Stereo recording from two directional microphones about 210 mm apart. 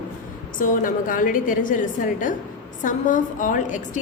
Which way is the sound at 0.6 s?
40° left (ahead or behind).